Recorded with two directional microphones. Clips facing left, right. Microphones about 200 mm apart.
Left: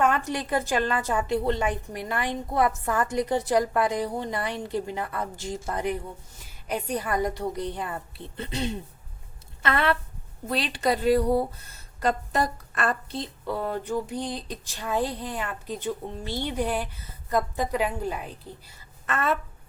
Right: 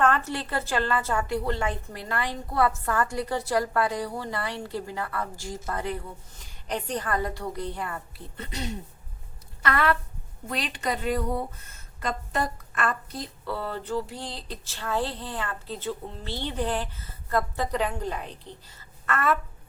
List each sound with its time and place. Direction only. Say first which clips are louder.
0.0 s a woman's voice: even; 15° left (ahead or behind); by 13.1 s 35° left (ahead or behind)
13.1 s a woman's voice: left 3 dB; 20° left (ahead or behind)
19.0 s a woman's voice: right 1 dB; 20° left (ahead or behind)